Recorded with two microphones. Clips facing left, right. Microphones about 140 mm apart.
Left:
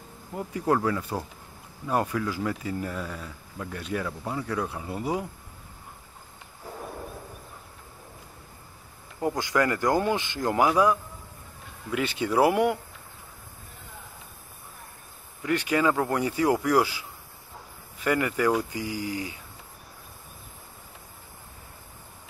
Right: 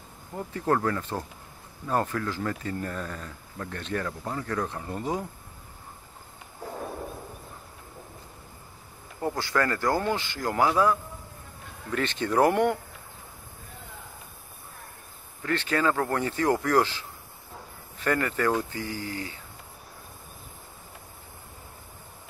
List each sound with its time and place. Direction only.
0.3 s speech: 10° left (ahead or behind)
9.2 s speech: 15° left (ahead or behind)
15.4 s speech: 10° left (ahead or behind)